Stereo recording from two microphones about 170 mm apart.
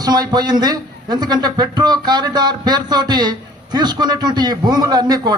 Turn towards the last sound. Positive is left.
turn(degrees=-25)  # may be behind; listen again after turning